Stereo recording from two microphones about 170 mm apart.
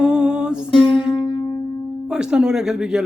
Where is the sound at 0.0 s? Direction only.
5° right (ahead or behind).